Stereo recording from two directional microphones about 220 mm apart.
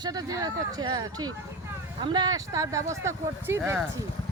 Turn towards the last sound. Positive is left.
turn(degrees=-10)  # may be behind; listen again after turning